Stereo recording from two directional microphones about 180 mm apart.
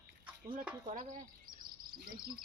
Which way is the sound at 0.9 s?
45° right (ahead or behind).